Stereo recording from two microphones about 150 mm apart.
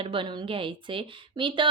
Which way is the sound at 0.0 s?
35° right (ahead or behind).